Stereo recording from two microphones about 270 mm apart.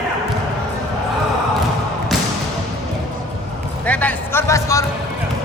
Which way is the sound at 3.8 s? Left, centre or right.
Centre.